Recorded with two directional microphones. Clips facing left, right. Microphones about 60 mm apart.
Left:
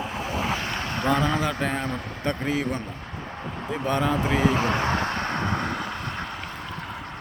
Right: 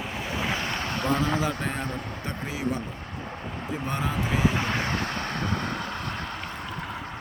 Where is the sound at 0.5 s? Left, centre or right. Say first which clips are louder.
Left 1 dB; centre.